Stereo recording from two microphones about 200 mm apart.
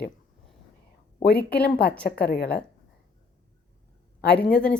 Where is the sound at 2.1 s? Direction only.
50° left (ahead or behind).